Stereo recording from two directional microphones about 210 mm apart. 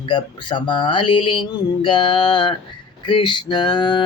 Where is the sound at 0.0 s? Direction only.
20° left (ahead or behind).